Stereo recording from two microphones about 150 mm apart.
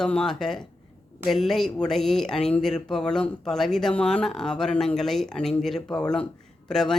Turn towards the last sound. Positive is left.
turn(degrees=5)  # may be behind; listen again after turning